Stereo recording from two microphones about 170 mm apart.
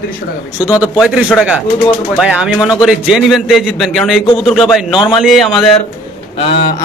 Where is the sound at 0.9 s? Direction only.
Centre (ahead or behind).